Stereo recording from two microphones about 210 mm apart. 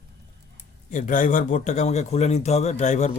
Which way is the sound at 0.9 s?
40° left (ahead or behind).